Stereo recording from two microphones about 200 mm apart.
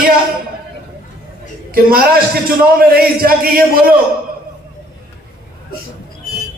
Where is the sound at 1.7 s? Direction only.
50° right (ahead or behind).